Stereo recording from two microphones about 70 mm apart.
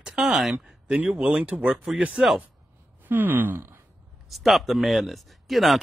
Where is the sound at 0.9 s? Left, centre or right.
Centre.